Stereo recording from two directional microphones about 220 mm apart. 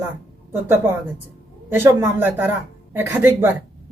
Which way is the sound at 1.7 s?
10° right (ahead or behind).